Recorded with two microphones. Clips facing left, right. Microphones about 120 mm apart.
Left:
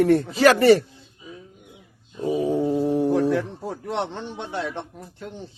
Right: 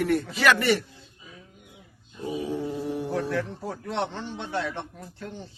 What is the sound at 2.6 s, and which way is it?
Insect, 30° left (ahead or behind).